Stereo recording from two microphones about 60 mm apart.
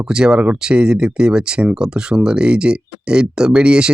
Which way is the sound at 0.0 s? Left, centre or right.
Centre.